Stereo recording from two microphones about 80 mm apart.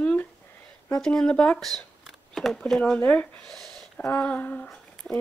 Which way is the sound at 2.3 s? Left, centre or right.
Centre.